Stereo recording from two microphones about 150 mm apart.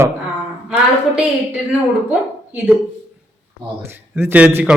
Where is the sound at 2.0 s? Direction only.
10° right (ahead or behind).